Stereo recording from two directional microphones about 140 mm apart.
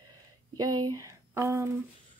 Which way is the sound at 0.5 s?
30° right (ahead or behind).